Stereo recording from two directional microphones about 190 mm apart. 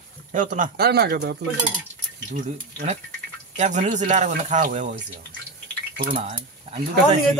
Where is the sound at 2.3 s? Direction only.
40° right (ahead or behind).